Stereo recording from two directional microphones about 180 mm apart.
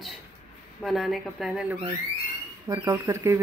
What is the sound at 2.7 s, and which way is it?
Speech, 15° right (ahead or behind).